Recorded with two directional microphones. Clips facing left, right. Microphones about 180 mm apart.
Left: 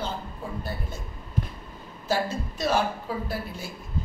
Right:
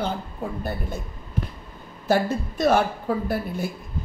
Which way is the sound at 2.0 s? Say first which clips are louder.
Right 5 dB; 60° right (ahead or behind).